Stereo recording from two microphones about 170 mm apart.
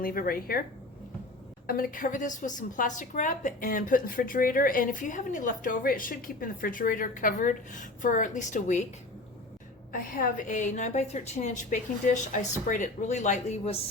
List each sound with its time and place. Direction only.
0.0 s speech: 60° left (ahead or behind)
1.6 s a woman's voice: 55° left (ahead or behind)
9.9 s a woman's voice: 55° left (ahead or behind)